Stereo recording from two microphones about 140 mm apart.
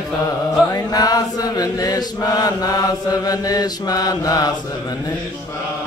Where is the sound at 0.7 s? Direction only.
30° left (ahead or behind).